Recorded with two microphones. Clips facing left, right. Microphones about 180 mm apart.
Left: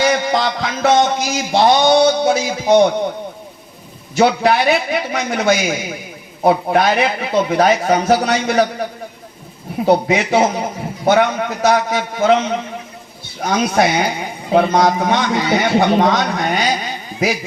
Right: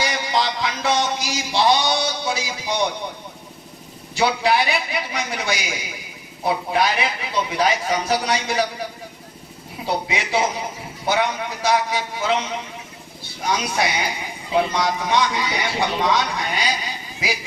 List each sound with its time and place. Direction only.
0.0 s a sound: 50° left (ahead or behind)
4.2 s a man's voice: 45° left (ahead or behind)
9.8 s a man's voice: 45° left (ahead or behind)